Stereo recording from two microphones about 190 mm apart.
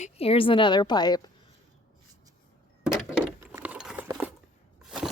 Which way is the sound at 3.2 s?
10° right (ahead or behind).